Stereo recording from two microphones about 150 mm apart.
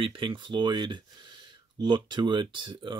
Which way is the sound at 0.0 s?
35° right (ahead or behind).